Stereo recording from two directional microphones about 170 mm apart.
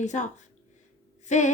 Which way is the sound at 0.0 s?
45° left (ahead or behind).